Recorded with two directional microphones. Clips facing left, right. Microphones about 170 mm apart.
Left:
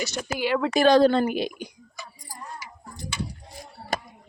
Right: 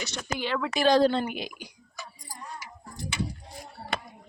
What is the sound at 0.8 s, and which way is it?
Speech, 60° left (ahead or behind).